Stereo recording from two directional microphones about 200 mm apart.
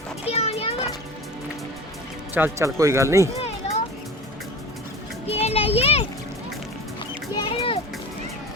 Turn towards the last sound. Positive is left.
turn(degrees=25)  # may be behind; listen again after turning